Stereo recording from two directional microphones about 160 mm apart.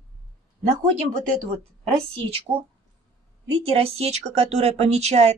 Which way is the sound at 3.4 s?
35° right (ahead or behind).